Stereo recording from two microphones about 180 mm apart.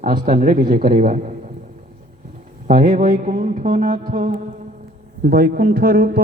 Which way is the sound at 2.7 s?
45° right (ahead or behind).